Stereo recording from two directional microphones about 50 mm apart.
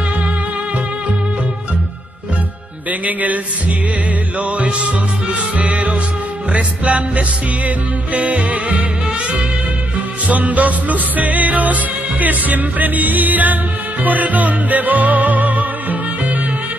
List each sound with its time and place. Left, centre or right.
2.9 s music: right
4.4 s music: right
10.2 s music: right